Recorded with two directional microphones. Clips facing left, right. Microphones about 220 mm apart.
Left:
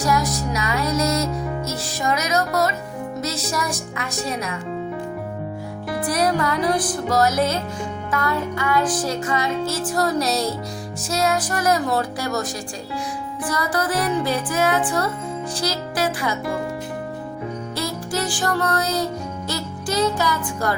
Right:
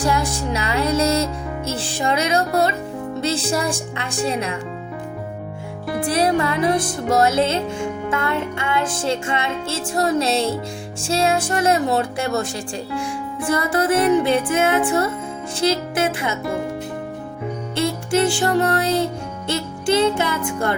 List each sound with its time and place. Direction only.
0.0 s music: 30° right (ahead or behind)
3.2 s speech: 30° right (ahead or behind)
6.0 s music: 25° right (ahead or behind)
17.7 s music: 25° right (ahead or behind)